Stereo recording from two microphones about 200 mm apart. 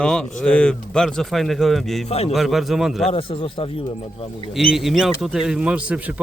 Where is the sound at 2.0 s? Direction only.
30° left (ahead or behind).